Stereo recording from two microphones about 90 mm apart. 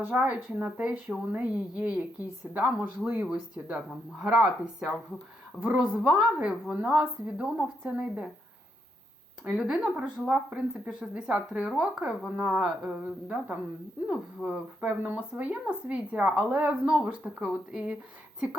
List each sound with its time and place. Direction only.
0.0 s speech: 15° right (ahead or behind)
9.6 s speech: 5° right (ahead or behind)